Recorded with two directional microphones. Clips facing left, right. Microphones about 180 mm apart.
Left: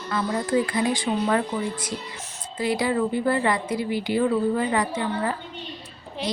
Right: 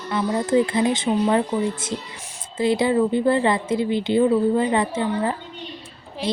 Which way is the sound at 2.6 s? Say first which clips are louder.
Right 4 dB; 25° right (ahead or behind).